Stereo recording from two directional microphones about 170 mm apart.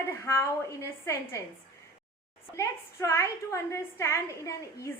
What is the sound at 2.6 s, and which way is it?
A woman's voice, 15° left (ahead or behind).